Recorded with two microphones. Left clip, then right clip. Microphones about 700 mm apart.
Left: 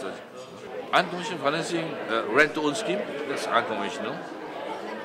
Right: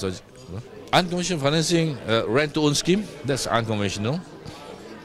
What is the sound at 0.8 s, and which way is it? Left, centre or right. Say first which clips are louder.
A man's voice: right 3 dB; right.